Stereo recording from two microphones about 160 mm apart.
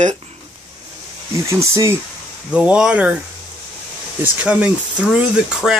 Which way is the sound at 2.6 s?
5° right (ahead or behind).